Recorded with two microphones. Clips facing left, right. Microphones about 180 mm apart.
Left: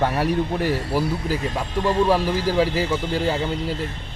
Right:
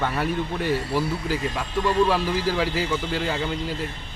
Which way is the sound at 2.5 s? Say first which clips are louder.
Left 5 dB; 40° left (ahead or behind).